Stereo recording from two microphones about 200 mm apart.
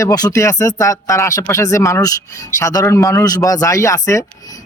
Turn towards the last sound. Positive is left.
turn(degrees=15)  # may be behind; listen again after turning